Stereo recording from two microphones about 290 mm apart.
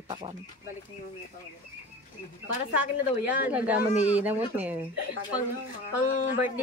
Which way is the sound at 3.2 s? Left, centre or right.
Centre.